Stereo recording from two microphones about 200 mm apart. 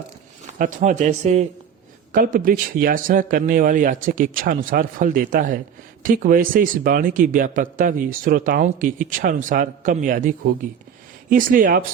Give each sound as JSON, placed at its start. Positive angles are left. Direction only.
{"t": 0.6, "sound": "speech", "side_deg": -40}